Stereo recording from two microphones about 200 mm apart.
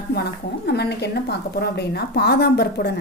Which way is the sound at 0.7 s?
55° left (ahead or behind).